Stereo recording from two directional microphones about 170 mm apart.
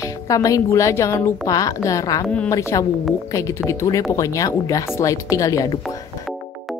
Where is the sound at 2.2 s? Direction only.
5° left (ahead or behind).